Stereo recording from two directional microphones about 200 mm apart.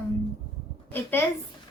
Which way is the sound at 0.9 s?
10° left (ahead or behind).